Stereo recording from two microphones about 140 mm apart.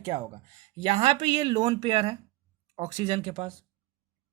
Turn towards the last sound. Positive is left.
turn(degrees=-55)  # may be behind; listen again after turning